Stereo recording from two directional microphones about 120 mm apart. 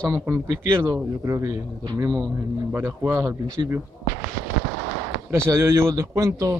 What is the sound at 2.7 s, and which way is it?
Speech, 20° right (ahead or behind).